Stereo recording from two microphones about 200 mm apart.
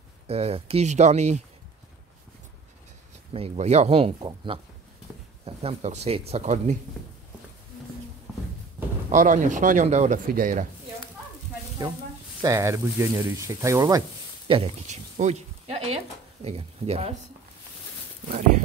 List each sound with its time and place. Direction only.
0.3 s speech: 30° right (ahead or behind)
3.3 s speech: 30° right (ahead or behind)
9.1 s speech: 40° right (ahead or behind)
12.4 s speech: 15° right (ahead or behind)
14.5 s speech: 30° right (ahead or behind)